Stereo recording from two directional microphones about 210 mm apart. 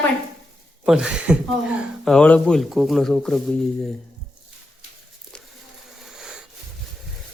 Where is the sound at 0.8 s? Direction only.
5° right (ahead or behind).